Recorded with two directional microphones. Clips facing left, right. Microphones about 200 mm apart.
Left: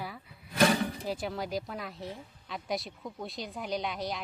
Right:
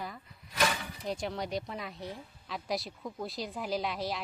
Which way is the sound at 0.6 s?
35° left (ahead or behind).